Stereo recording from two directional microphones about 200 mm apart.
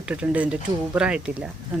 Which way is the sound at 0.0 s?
5° right (ahead or behind).